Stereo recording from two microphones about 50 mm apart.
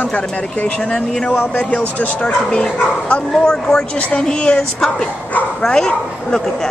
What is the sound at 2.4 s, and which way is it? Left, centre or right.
A man's voice, left.